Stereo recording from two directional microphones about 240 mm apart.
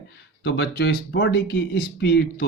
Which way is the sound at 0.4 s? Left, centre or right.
Left.